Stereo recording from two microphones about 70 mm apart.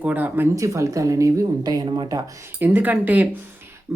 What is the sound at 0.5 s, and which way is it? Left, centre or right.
Speech, right.